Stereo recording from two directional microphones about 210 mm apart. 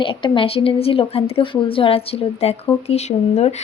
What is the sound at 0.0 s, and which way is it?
Speech, 25° left (ahead or behind).